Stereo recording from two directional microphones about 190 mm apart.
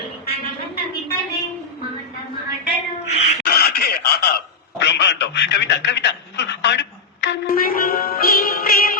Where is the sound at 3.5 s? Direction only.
55° left (ahead or behind).